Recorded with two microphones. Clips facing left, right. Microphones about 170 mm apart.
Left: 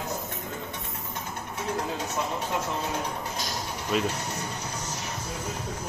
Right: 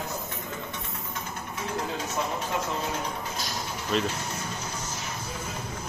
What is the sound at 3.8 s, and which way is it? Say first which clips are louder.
Speech: even; 15° left (ahead or behind).